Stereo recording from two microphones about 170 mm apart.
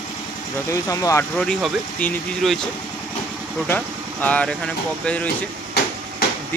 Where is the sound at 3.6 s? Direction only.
10° left (ahead or behind).